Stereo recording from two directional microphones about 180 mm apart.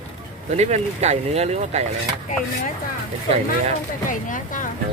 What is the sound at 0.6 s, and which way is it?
Speech, 35° right (ahead or behind).